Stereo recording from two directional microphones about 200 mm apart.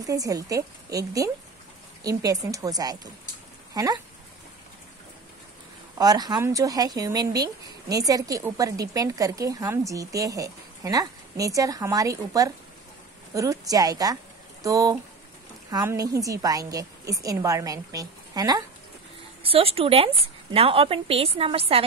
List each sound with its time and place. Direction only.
0.0 s speech: 15° right (ahead or behind)
5.9 s a woman's voice: 20° right (ahead or behind)